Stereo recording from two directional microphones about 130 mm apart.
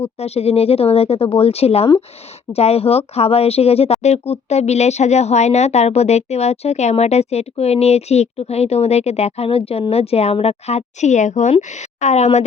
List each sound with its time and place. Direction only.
0.0 s speech: 50° left (ahead or behind)